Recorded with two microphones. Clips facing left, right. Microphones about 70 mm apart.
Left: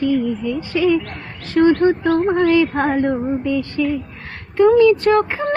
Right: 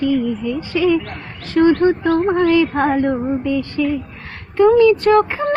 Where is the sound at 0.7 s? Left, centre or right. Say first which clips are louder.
Even; right.